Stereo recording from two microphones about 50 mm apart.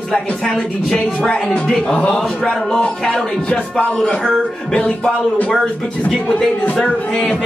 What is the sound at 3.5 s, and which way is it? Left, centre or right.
Speech, left.